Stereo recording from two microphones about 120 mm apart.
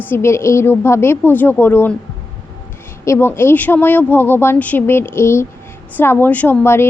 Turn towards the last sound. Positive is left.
turn(degrees=20)  # may be behind; listen again after turning